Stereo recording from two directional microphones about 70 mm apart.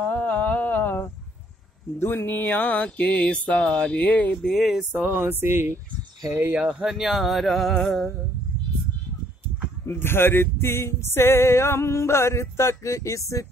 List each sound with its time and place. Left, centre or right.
0.0 s a sound: left
2.0 s mantra: left; by 4.5 s centre
4.5 s music: centre
4.9 s a sound: right
6.5 s music: centre
9.8 s music: left